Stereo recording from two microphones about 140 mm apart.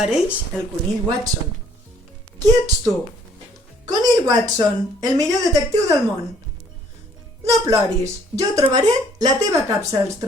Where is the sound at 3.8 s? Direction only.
30° right (ahead or behind).